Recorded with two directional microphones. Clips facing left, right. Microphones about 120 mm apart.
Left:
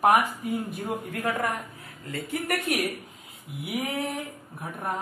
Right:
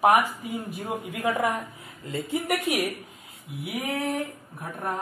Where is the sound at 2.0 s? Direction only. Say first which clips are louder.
Right 3 dB; 25° right (ahead or behind).